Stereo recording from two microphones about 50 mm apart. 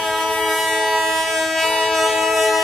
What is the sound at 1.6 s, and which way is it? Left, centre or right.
Train, centre.